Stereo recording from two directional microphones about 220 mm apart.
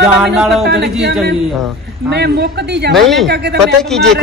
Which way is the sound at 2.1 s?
50° right (ahead or behind).